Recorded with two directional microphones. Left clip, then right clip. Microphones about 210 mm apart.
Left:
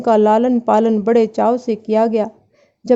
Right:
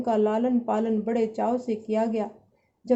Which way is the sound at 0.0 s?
50° left (ahead or behind).